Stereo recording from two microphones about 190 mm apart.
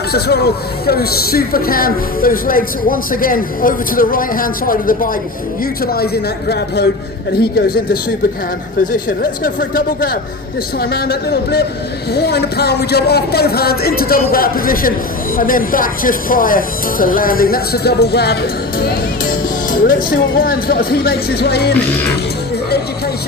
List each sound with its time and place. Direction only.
0.1 s speech: 55° left (ahead or behind)
7.3 s speech: 55° left (ahead or behind)
9.4 s speech: 50° left (ahead or behind)
18.8 s music: 50° left (ahead or behind)
19.9 s speech: 50° left (ahead or behind)